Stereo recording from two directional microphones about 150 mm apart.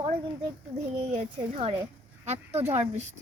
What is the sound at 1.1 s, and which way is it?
A woman's voice, 40° right (ahead or behind).